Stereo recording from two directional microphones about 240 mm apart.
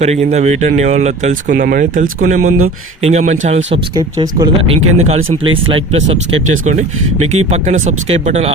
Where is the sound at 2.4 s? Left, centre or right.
Right.